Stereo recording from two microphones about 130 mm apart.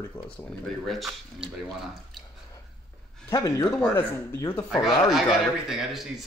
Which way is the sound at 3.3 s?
25° left (ahead or behind).